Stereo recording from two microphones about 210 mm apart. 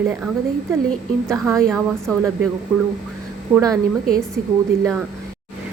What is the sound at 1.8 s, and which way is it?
Speech, centre (ahead or behind).